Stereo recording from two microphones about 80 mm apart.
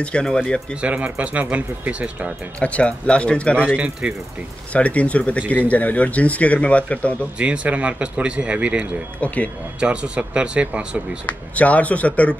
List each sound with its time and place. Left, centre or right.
0.0 s speech: centre
0.7 s speech: centre
2.6 s speech: centre
3.5 s speech: centre
4.7 s speech: centre
7.3 s speech: centre
9.2 s speech: centre
9.8 s speech: centre
11.2 s speech: centre